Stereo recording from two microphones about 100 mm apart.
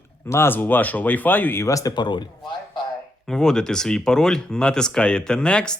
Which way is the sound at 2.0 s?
50° left (ahead or behind).